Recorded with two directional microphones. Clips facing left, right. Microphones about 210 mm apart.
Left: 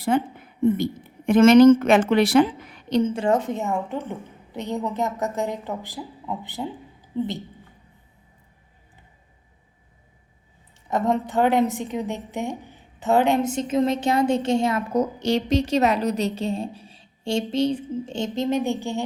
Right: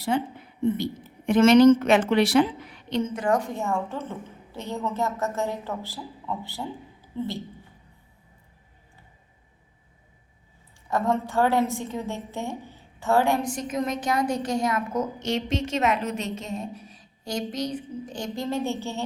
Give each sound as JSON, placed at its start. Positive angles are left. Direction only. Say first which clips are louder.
{"t": 0.1, "sound": "a woman's voice", "louder": "left 4 dB", "side_deg": 50}
{"t": 2.9, "sound": "a woman's voice", "louder": "left 4 dB", "side_deg": 30}
{"t": 10.8, "sound": "a woman's voice", "louder": "left 2 dB", "side_deg": 20}